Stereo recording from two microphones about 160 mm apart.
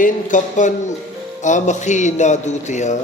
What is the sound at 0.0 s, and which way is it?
Speech, 55° left (ahead or behind).